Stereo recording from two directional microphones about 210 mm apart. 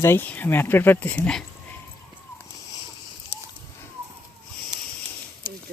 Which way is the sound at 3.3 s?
55° left (ahead or behind).